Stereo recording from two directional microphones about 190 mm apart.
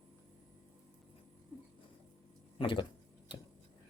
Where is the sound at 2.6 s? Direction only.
25° left (ahead or behind).